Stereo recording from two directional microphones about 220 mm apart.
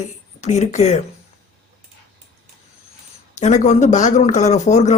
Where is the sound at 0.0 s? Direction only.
30° left (ahead or behind).